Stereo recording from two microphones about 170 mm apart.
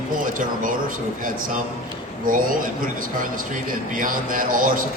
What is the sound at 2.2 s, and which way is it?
Speech, 55° right (ahead or behind).